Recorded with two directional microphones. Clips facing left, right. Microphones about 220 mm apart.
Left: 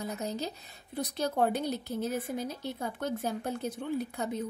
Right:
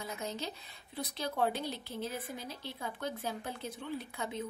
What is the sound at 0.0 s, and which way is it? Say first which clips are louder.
A woman's voice: left 5 dB; 40° left (ahead or behind).